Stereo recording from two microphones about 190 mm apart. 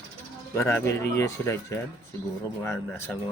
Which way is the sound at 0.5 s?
15° left (ahead or behind).